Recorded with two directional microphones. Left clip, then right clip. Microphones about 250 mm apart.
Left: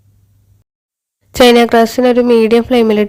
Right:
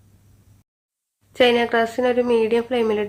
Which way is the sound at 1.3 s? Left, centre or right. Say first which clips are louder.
Left 10 dB; left.